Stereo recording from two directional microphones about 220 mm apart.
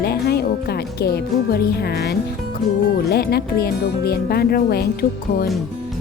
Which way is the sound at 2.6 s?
Centre (ahead or behind).